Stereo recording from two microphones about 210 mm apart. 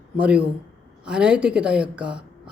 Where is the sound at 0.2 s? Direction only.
5° right (ahead or behind).